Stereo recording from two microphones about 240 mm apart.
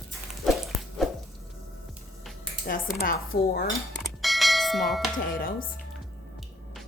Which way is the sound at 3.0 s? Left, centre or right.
Left.